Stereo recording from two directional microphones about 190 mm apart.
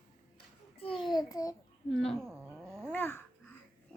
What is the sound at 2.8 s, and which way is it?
Babbling, 10° left (ahead or behind).